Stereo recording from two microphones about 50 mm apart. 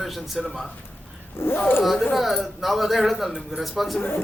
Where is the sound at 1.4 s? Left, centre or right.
Left.